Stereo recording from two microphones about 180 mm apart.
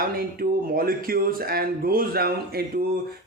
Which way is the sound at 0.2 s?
55° right (ahead or behind).